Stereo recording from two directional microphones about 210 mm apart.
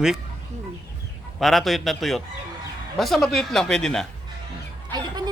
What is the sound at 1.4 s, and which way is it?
Speech, centre (ahead or behind).